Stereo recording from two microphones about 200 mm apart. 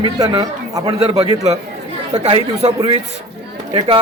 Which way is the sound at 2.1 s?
35° right (ahead or behind).